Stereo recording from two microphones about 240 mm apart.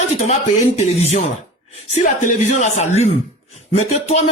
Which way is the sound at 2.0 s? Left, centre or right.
Left.